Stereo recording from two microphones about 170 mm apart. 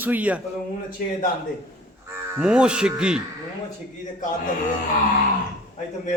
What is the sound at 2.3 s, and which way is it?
Speech, 5° right (ahead or behind).